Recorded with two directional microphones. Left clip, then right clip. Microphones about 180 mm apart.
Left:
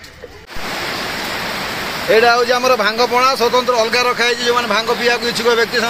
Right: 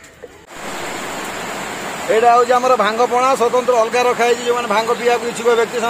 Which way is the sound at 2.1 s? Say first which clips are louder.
Even; 5° left (ahead or behind).